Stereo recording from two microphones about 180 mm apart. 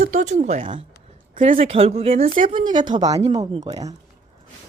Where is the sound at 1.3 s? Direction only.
45° right (ahead or behind).